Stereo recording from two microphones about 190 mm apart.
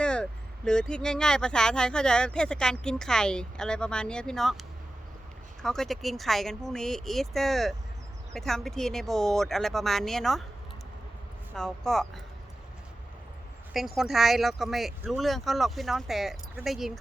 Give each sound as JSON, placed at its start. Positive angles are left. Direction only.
{"t": 0.0, "sound": "speech", "side_deg": 5}
{"t": 5.6, "sound": "speech", "side_deg": 0}
{"t": 11.5, "sound": "speech", "side_deg": 5}
{"t": 13.7, "sound": "speech", "side_deg": 0}